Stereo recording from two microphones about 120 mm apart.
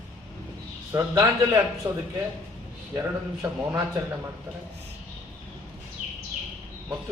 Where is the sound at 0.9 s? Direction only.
20° right (ahead or behind).